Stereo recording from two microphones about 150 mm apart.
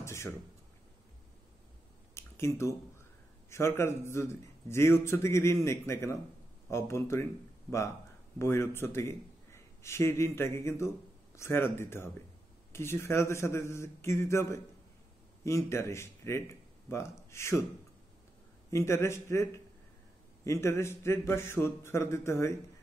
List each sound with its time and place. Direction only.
0.0 s speech: 15° left (ahead or behind)
2.1 s a sound: 20° left (ahead or behind)
3.4 s speech: 20° left (ahead or behind)
8.4 s a man's voice: 15° left (ahead or behind)
18.7 s speech: 20° left (ahead or behind)